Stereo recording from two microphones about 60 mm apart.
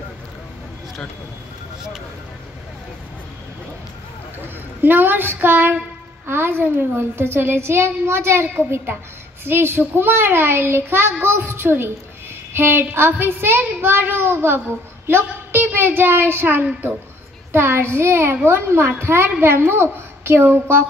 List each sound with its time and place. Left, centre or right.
4.8 s a child's voice: right